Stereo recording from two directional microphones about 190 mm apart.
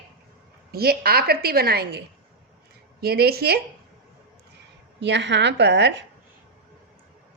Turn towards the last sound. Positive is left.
turn(degrees=-65)  # may be behind; listen again after turning